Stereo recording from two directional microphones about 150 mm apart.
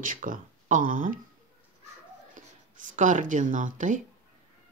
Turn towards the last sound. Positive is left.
turn(degrees=-60)  # may be behind; listen again after turning